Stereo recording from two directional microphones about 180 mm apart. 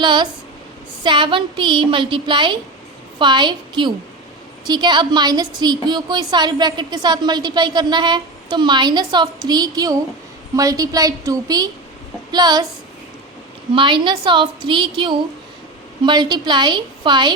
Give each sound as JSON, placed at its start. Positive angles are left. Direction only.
{"t": 0.0, "sound": "a woman's voice", "side_deg": -25}
{"t": 13.7, "sound": "a woman's voice", "side_deg": -25}